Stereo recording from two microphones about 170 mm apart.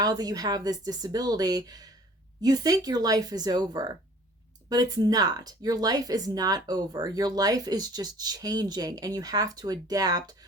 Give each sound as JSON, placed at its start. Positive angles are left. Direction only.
{"t": 0.0, "sound": "speech", "side_deg": -20}